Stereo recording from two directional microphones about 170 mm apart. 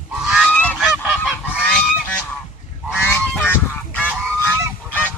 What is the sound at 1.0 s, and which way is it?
Goose, 5° right (ahead or behind).